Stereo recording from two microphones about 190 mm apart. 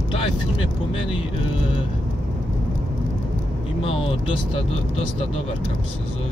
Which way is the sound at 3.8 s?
30° left (ahead or behind).